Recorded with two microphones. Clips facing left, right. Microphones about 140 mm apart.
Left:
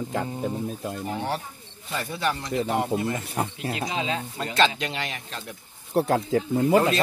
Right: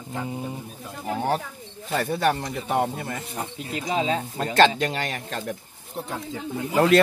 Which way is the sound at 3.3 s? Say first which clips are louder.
Left 3 dB; 75° left (ahead or behind).